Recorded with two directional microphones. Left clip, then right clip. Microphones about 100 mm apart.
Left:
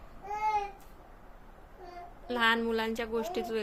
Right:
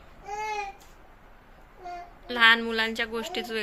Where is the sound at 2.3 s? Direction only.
20° left (ahead or behind).